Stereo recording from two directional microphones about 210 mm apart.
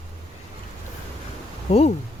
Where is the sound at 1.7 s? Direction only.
30° left (ahead or behind).